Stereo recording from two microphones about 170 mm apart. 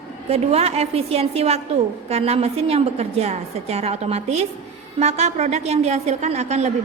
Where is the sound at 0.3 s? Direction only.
35° right (ahead or behind).